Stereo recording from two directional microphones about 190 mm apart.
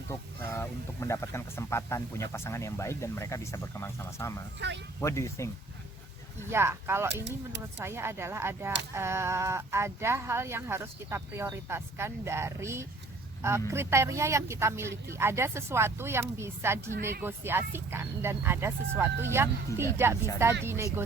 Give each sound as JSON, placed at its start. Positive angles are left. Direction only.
{"t": 0.1, "sound": "speech", "side_deg": 15}
{"t": 4.6, "sound": "speech", "side_deg": -65}
{"t": 4.9, "sound": "speech", "side_deg": 15}
{"t": 6.5, "sound": "speech", "side_deg": -15}